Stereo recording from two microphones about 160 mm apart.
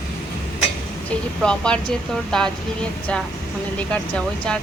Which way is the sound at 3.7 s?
5° left (ahead or behind).